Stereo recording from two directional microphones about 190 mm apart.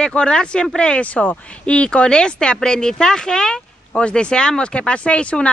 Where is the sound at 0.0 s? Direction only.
5° left (ahead or behind).